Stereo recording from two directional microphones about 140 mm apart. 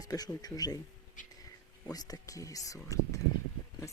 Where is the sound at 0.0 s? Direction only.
25° left (ahead or behind).